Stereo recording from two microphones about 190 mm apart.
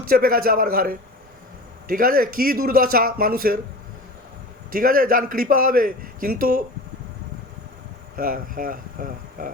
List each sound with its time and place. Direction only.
0.1 s a man's voice: 50° right (ahead or behind)
4.7 s a man's voice: 50° right (ahead or behind)
8.1 s speech: 45° right (ahead or behind)